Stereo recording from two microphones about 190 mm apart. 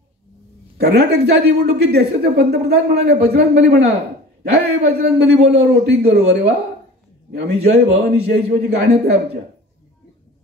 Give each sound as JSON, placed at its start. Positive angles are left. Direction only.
{"t": 0.7, "sound": "speech", "side_deg": -60}